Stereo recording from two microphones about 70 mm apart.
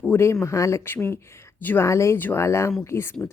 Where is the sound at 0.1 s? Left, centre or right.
Left.